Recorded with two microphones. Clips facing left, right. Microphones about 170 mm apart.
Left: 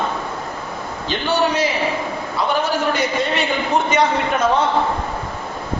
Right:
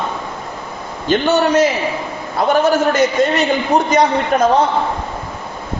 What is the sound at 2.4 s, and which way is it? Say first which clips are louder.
A woman's voice: right 7 dB; 50° right (ahead or behind).